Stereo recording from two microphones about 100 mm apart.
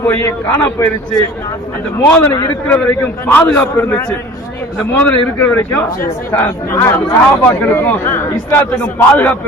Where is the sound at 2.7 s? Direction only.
15° left (ahead or behind).